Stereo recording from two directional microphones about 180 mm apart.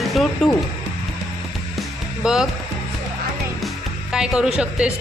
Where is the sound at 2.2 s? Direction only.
5° right (ahead or behind).